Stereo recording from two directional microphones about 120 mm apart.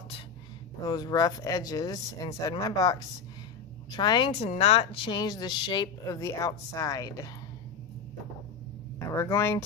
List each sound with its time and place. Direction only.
0.8 s speech: 35° left (ahead or behind)
4.5 s speech: 55° left (ahead or behind); by 7.2 s 30° left (ahead or behind)
9.1 s speech: 25° left (ahead or behind)